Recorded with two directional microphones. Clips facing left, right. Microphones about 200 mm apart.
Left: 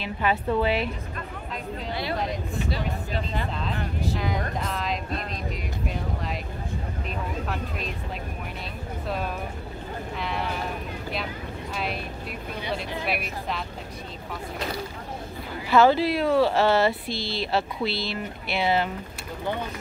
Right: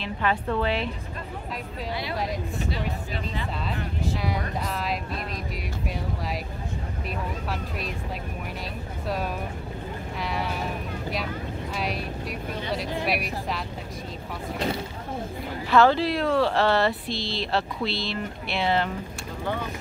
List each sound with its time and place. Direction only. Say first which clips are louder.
0.0 s a woman's voice: left 1 dB; 10° left (ahead or behind)
4.6 s speech: even; 5° right (ahead or behind)
9.0 s speech: right 1 dB; 10° right (ahead or behind)
10.2 s a sound: right 1 dB; 5° right (ahead or behind)
11.8 s speech: right 1 dB; 40° right (ahead or behind)
15.7 s speech: left 1 dB; 5° left (ahead or behind)